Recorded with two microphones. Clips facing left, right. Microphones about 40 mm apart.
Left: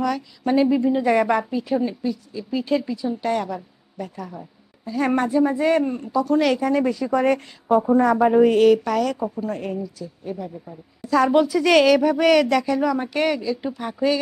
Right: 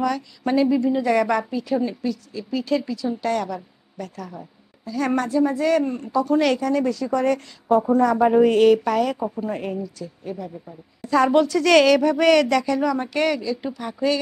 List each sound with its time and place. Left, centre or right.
0.0 s speech: centre
0.6 s a woman's voice: centre
4.8 s speech: left
5.9 s speech: centre
6.6 s speech: left
8.2 s a woman's voice: centre
9.7 s a woman's voice: centre
11.4 s speech: centre